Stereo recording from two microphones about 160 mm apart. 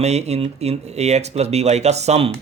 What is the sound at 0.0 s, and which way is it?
A man's voice, 45° right (ahead or behind).